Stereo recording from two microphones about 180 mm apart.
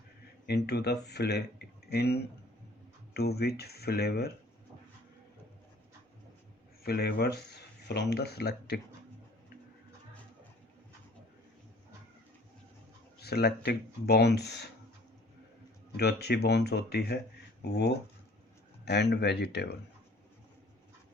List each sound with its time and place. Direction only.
0.4 s speech: 65° left (ahead or behind)
6.8 s speech: 60° left (ahead or behind)
13.1 s speech: 65° left (ahead or behind)
15.9 s speech: 65° left (ahead or behind)
18.9 s speech: 70° left (ahead or behind)